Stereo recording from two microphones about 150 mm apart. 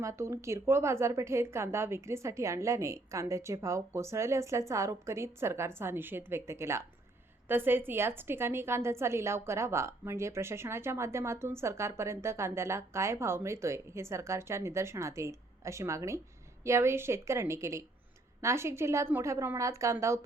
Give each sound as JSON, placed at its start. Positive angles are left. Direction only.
{"t": 0.0, "sound": "a woman's voice", "side_deg": -20}